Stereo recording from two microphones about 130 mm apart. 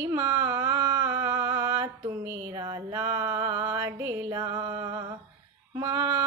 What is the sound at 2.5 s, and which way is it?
Music, 30° right (ahead or behind).